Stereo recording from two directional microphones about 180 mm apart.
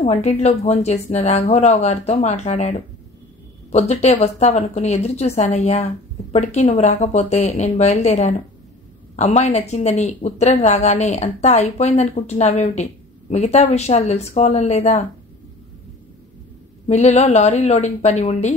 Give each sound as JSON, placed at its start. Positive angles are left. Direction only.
{"t": 0.0, "sound": "speech", "side_deg": 35}
{"t": 16.8, "sound": "speech", "side_deg": 40}